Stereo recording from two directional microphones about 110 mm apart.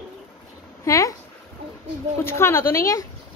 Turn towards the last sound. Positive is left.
turn(degrees=25)  # may be behind; listen again after turning